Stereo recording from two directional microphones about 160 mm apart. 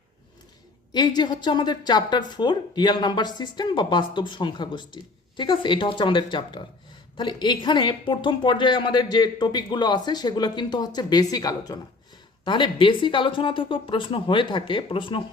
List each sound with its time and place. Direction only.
0.9 s a woman's voice: 25° left (ahead or behind)